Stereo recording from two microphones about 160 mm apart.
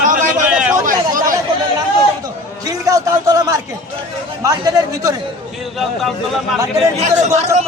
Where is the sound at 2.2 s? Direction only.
20° right (ahead or behind).